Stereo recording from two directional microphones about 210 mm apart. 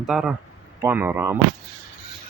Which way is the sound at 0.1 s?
5° right (ahead or behind).